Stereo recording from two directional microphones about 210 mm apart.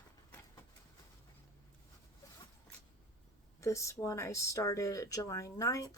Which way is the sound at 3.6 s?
15° left (ahead or behind).